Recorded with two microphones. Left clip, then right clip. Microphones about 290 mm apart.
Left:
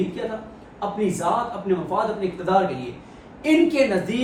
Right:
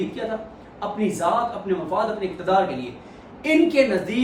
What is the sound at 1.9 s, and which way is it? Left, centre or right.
Speech, centre.